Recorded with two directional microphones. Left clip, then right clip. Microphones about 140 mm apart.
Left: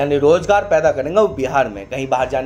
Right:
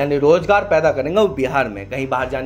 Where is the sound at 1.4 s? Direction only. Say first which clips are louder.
Left 2 dB; 35° right (ahead or behind).